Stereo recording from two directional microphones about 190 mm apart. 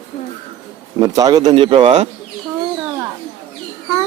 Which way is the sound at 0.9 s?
20° right (ahead or behind).